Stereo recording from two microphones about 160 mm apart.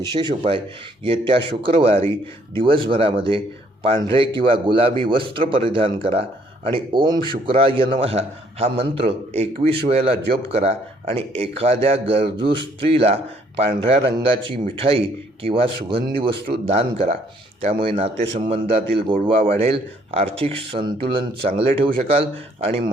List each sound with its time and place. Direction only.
0.0 s a man's voice: 25° right (ahead or behind)